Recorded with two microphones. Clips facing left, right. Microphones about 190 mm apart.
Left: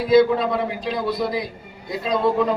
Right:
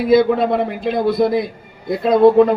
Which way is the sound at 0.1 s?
60° right (ahead or behind).